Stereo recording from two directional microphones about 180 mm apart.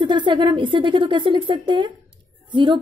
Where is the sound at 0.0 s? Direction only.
25° right (ahead or behind).